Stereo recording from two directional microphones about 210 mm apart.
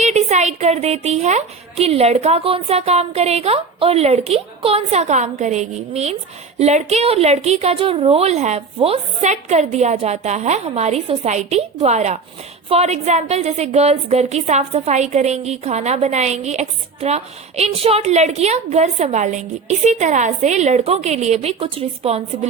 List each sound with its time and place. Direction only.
0.0 s a woman's voice: 35° right (ahead or behind)